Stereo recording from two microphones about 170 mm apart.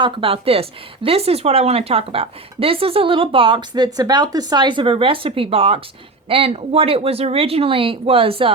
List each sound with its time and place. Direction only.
0.0 s speech: 30° right (ahead or behind)